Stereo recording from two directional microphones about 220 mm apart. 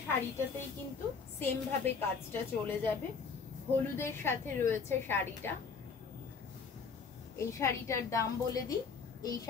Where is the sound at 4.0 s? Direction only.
10° left (ahead or behind).